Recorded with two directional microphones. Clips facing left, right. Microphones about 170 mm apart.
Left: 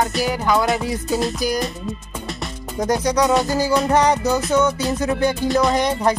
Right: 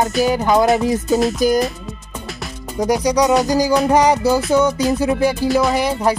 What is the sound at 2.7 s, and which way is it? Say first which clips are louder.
Music: right 3 dB; 10° right (ahead or behind).